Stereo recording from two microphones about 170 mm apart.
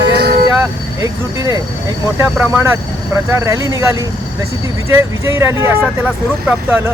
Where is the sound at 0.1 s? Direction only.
70° right (ahead or behind).